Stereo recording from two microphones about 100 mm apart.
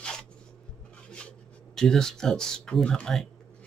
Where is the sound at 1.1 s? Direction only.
10° left (ahead or behind).